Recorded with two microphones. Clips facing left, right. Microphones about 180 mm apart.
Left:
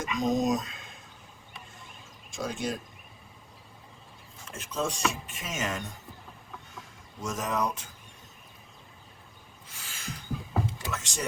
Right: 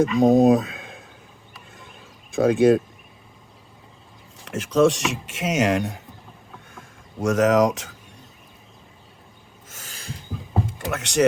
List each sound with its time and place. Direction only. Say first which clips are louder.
0.2 s speech: right 10 dB; 60° right (ahead or behind)
2.3 s speech: right 17 dB; 60° right (ahead or behind)
4.4 s speech: right 15 dB; 80° right
6.7 s speech: right 14 dB; 60° right (ahead or behind); by 7.9 s 90° right
9.6 s a sound: right 3 dB; 45° right (ahead or behind)
10.7 s speech: right 8 dB; 60° right (ahead or behind)